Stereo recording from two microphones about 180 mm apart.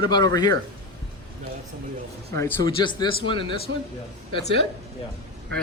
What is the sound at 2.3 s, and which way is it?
A man's voice, 20° left (ahead or behind).